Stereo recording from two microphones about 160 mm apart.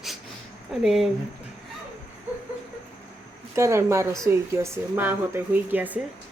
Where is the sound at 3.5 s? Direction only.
15° right (ahead or behind).